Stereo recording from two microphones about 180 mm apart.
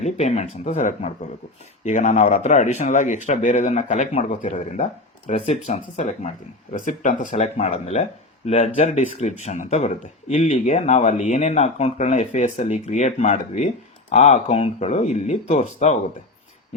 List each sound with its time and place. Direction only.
0.0 s speech: 40° left (ahead or behind)
4.4 s speech: 30° left (ahead or behind)